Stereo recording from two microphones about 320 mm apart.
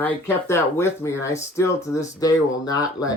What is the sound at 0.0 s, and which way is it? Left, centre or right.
Speech, centre.